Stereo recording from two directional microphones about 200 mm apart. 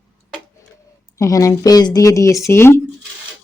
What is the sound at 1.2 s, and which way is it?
Speech, 15° left (ahead or behind).